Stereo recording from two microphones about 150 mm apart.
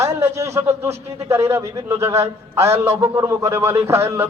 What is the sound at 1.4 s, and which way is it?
A man's voice, 15° right (ahead or behind).